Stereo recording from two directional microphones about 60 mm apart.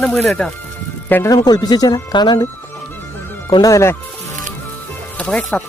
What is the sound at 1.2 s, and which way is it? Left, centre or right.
Speech, left.